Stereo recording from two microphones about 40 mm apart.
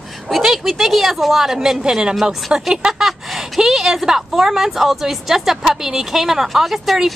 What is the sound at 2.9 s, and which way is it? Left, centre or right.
Speech, centre.